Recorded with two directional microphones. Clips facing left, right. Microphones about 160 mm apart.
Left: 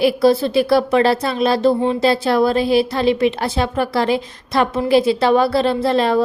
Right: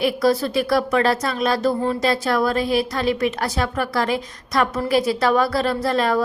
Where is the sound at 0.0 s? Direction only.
30° left (ahead or behind).